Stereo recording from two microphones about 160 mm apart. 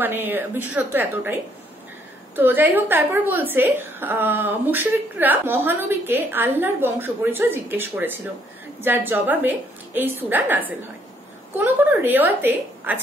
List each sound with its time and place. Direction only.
0.0 s a woman's voice: 15° right (ahead or behind)